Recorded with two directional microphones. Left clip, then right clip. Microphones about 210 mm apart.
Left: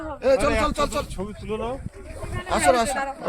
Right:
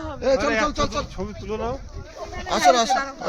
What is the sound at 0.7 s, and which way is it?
Speech, 55° left (ahead or behind).